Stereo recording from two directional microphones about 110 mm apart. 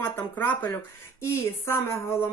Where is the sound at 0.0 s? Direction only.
15° left (ahead or behind).